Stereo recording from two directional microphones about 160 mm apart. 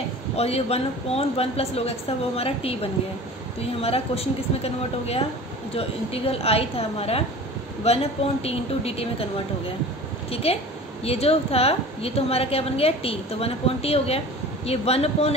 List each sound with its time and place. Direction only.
0.4 s a woman's voice: 40° left (ahead or behind)
10.3 s a woman's voice: 40° left (ahead or behind)